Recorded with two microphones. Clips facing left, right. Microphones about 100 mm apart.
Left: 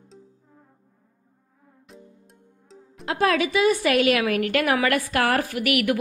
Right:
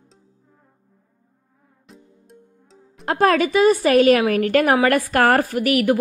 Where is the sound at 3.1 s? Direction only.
45° right (ahead or behind).